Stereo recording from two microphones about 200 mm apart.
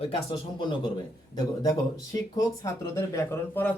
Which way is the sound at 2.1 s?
15° left (ahead or behind).